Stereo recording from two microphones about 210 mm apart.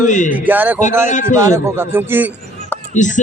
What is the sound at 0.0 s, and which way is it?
Speech, 35° left (ahead or behind).